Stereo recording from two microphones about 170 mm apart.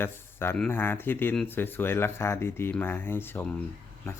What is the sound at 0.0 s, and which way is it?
Speech, 15° left (ahead or behind).